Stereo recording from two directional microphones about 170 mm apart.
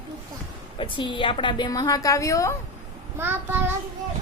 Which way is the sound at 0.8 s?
30° left (ahead or behind).